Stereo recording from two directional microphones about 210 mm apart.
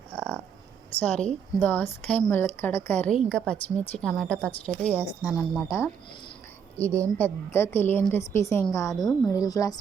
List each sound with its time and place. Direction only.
0.2 s a sound: 5° left (ahead or behind)
1.2 s a woman's voice: 5° left (ahead or behind)
5.6 s a woman's voice: 15° left (ahead or behind)
6.8 s a woman's voice: 15° right (ahead or behind)
7.2 s a woman's voice: 10° left (ahead or behind)